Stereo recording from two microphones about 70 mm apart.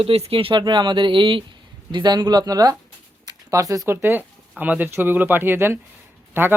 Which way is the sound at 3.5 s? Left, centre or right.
Right.